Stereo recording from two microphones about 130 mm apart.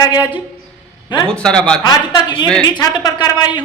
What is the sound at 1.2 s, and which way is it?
Speech, 5° left (ahead or behind).